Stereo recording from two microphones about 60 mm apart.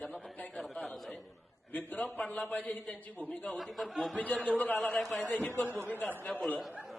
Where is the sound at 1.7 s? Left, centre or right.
Left.